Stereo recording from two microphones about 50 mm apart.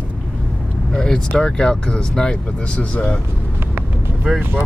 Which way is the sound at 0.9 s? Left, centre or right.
Centre.